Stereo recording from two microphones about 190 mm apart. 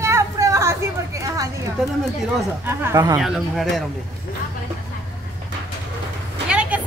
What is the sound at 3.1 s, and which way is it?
Speech, centre (ahead or behind).